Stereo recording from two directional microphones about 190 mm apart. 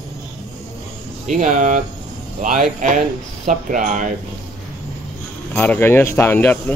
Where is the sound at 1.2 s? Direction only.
40° right (ahead or behind).